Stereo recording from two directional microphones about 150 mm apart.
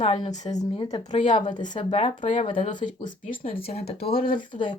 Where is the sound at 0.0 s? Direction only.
35° left (ahead or behind).